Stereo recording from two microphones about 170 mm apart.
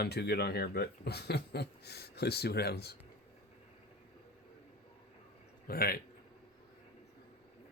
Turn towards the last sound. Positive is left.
turn(degrees=60)  # may be behind; listen again after turning